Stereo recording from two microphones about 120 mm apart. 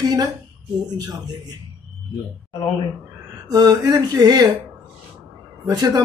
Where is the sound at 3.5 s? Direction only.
35° right (ahead or behind).